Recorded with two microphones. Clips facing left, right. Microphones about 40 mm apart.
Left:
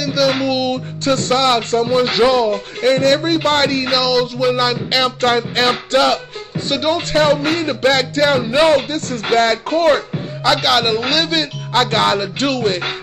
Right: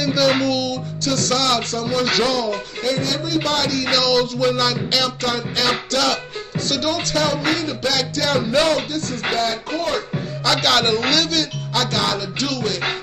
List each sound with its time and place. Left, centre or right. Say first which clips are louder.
0.0 s music: left 1 dB; centre
0.6 s music: left 4 dB; left
2.8 s music: left 10 dB; left
3.8 s music: left 2 dB; centre
5.2 s music: left 6 dB; left
5.7 s music: left 4 dB; left
8.3 s music: left 3 dB; left
8.7 s speech: left 6 dB; left
10.6 s music: left 2 dB; centre
11.2 s music: left 3 dB; left